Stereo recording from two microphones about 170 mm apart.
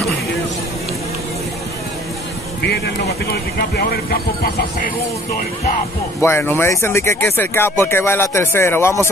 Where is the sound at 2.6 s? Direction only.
65° left (ahead or behind).